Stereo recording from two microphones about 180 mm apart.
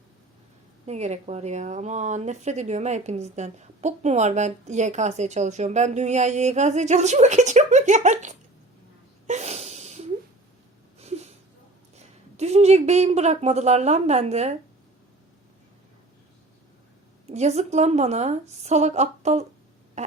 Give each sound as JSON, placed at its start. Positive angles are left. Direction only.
{"t": 0.9, "sound": "speech", "side_deg": -40}
{"t": 9.2, "sound": "a sound", "side_deg": -40}
{"t": 11.9, "sound": "a woman's voice", "side_deg": -35}
{"t": 17.3, "sound": "speech", "side_deg": -40}